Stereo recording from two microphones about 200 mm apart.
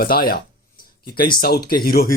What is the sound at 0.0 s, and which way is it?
Speech, 50° left (ahead or behind).